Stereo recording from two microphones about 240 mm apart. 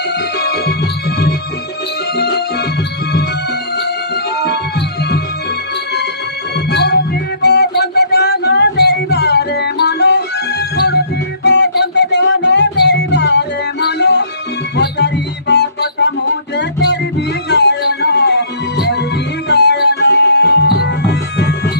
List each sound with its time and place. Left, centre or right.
0.4 s music: left
6.7 s music: left
11.4 s music: left